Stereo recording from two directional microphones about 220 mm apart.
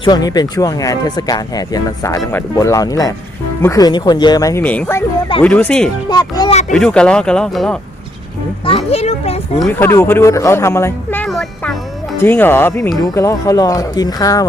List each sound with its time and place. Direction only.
0.0 s speech: 20° left (ahead or behind)
6.1 s a child's voice: 20° left (ahead or behind)
6.5 s speech: 30° left (ahead or behind)
6.7 s speech: 5° left (ahead or behind)
8.6 s a child's voice: 25° left (ahead or behind)
9.6 s speech: 5° left (ahead or behind)